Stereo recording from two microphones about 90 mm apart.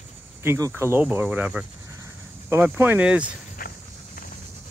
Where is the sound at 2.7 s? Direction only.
20° right (ahead or behind).